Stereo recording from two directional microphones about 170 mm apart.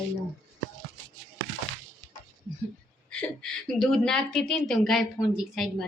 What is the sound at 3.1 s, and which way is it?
A woman's voice, 5° left (ahead or behind).